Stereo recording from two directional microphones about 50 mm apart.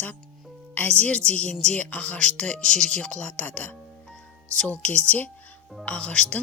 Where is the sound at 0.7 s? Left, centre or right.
Left.